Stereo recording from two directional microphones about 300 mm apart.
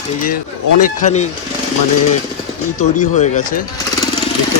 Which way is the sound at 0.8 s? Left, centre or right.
Left.